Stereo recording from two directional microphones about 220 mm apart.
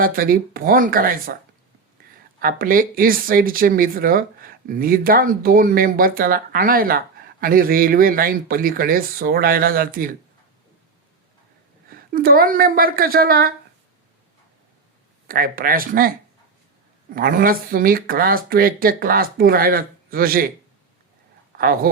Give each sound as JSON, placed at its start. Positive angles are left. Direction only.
{"t": 0.0, "sound": "speech", "side_deg": -40}
{"t": 2.0, "sound": "a sound", "side_deg": -40}
{"t": 2.4, "sound": "speech", "side_deg": -40}
{"t": 11.9, "sound": "a woman's voice", "side_deg": -40}
{"t": 15.3, "sound": "speech", "side_deg": -40}
{"t": 17.2, "sound": "speech", "side_deg": -40}
{"t": 21.6, "sound": "speech", "side_deg": -40}